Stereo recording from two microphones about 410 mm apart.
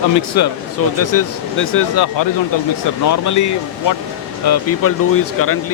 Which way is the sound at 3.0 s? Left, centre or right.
Left.